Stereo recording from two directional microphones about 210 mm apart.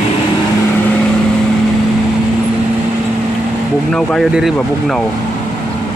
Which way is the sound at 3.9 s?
Centre (ahead or behind).